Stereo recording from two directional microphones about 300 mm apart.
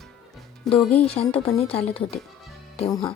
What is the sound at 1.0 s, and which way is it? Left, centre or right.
A woman's voice, centre.